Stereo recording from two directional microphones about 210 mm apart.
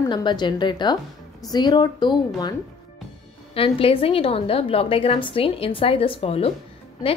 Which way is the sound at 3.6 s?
25° left (ahead or behind).